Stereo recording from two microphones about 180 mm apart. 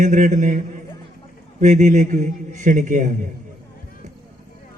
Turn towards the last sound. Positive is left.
turn(degrees=-45)  # may be behind; listen again after turning